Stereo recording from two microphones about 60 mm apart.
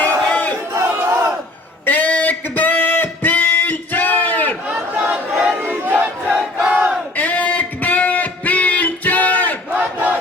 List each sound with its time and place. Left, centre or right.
0.0 s battle cry: left
0.7 s battle cry: right
1.8 s a sound: left
4.7 s crowd: right
5.5 s battle cry: right
7.2 s music: left
9.7 s battle cry: right